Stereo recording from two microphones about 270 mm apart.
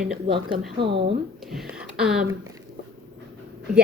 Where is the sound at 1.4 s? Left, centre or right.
Centre.